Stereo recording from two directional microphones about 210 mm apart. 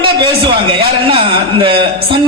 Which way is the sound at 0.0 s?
25° right (ahead or behind).